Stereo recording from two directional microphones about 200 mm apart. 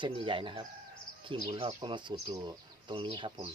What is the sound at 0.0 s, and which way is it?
Speech, 25° right (ahead or behind).